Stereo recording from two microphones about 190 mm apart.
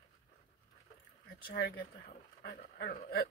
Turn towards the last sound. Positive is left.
turn(degrees=55)  # may be behind; listen again after turning